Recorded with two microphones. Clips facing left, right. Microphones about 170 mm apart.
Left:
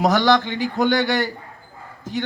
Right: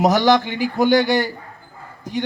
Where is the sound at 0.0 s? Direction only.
20° right (ahead or behind).